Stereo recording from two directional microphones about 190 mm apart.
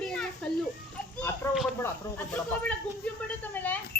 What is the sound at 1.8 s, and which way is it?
Speech, 10° left (ahead or behind).